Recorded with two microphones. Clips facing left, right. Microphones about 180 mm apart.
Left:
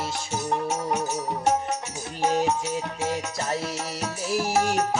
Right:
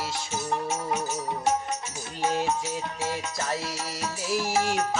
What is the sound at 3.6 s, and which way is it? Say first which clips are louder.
Music: left 3 dB; 55° left (ahead or behind).